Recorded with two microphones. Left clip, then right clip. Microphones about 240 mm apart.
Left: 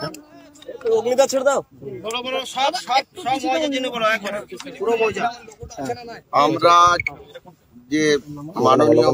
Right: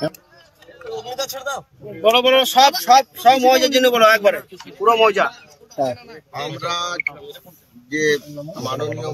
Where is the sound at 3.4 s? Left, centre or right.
Right.